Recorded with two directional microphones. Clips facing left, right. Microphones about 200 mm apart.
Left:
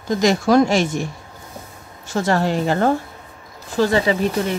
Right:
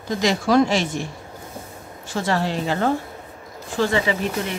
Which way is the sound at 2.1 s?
45° left (ahead or behind).